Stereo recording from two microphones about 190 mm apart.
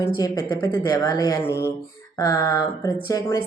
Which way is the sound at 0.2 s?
20° left (ahead or behind).